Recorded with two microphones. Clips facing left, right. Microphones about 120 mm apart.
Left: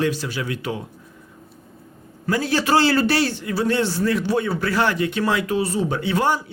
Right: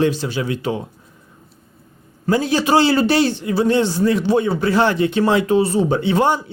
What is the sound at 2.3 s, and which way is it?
A man's voice, 20° right (ahead or behind).